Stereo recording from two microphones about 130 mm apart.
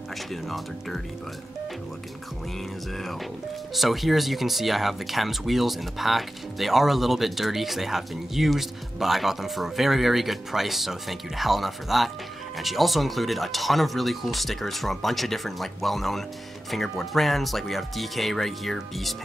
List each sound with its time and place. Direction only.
0.3 s speech: centre (ahead or behind)
3.7 s speech: centre (ahead or behind)